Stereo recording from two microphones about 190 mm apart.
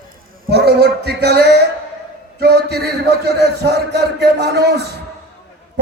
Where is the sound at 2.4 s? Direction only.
60° right (ahead or behind).